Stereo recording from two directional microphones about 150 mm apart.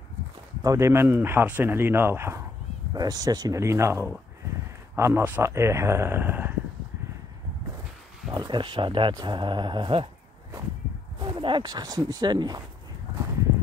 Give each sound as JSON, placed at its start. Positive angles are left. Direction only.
{"t": 0.6, "sound": "speech", "side_deg": -20}
{"t": 8.3, "sound": "speech", "side_deg": -30}
{"t": 11.2, "sound": "speech", "side_deg": -35}